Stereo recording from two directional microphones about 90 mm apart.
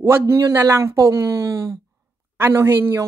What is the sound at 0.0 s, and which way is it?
Speech, 30° right (ahead or behind).